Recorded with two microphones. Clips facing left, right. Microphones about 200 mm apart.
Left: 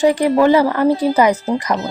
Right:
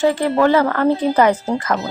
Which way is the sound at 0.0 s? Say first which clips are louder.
Left 3 dB; 15° left (ahead or behind).